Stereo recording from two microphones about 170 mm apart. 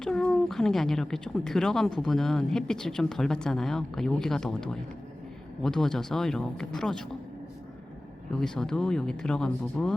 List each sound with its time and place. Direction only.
0.0 s speech: 5° left (ahead or behind)
8.4 s speech: 5° left (ahead or behind)